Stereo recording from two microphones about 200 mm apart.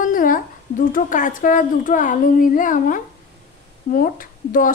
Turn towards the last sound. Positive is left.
turn(degrees=45)  # may be behind; listen again after turning